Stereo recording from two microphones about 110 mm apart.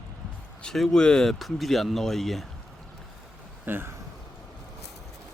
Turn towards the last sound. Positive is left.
turn(degrees=-20)  # may be behind; listen again after turning